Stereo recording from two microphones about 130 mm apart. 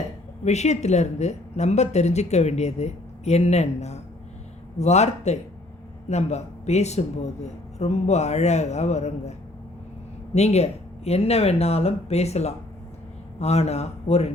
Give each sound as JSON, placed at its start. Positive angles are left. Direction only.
{"t": 0.4, "sound": "speech", "side_deg": 60}
{"t": 10.3, "sound": "speech", "side_deg": 55}